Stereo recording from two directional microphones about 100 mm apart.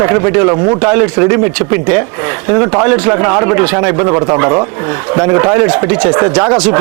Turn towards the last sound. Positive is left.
turn(degrees=-10)  # may be behind; listen again after turning